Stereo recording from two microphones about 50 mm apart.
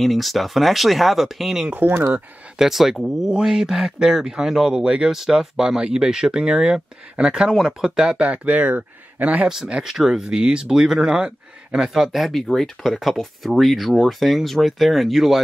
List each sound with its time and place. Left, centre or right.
0.0 s speech: centre
1.7 s speech: right
2.6 s speech: centre
5.1 s speech: centre
8.3 s speech: right
9.8 s speech: centre